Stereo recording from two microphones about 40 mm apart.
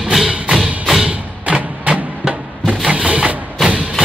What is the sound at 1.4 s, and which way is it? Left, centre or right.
Music, right.